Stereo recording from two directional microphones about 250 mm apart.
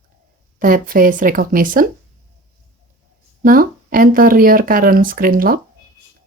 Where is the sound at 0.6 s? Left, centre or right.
Right.